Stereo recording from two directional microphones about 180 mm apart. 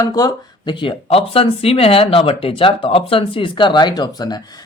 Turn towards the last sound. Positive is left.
turn(degrees=20)  # may be behind; listen again after turning